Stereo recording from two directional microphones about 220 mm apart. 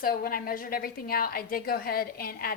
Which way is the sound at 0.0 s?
40° left (ahead or behind).